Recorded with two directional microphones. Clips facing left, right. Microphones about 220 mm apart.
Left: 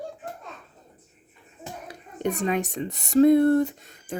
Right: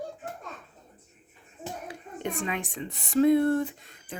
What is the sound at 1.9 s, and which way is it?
Speech, 40° left (ahead or behind).